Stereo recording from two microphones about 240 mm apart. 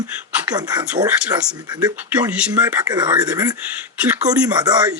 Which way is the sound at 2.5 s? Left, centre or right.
Centre.